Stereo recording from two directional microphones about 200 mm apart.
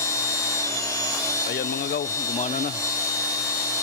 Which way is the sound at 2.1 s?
15° left (ahead or behind).